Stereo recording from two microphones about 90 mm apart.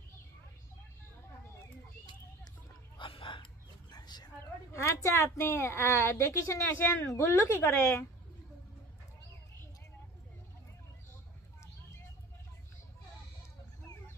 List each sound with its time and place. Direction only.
3.0 s a sound: 70° left (ahead or behind)
3.9 s bow-wow: 50° left (ahead or behind)
4.7 s a woman's voice: 30° left (ahead or behind)